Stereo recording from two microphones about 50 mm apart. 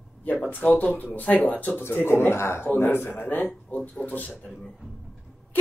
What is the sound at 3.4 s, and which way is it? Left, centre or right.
Speech, left.